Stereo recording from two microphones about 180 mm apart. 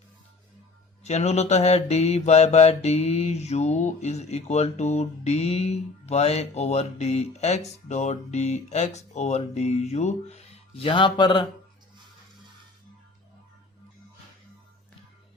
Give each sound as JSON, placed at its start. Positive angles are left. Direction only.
{"t": 1.0, "sound": "mantra", "side_deg": 35}